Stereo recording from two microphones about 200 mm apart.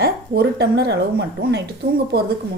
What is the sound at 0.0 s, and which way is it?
Speech, 55° right (ahead or behind).